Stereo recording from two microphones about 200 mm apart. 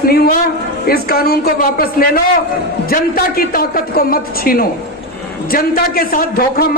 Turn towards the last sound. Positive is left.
turn(degrees=50)  # may be behind; listen again after turning